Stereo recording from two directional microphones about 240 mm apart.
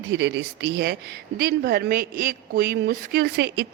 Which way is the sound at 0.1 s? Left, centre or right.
Right.